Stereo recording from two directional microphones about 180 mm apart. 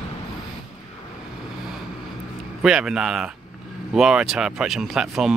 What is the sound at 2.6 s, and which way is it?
Speech, 5° right (ahead or behind).